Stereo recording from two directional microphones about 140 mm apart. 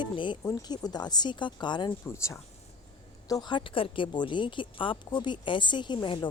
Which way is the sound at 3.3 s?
30° left (ahead or behind).